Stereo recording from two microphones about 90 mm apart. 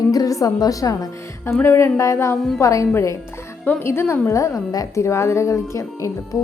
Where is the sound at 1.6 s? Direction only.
30° left (ahead or behind).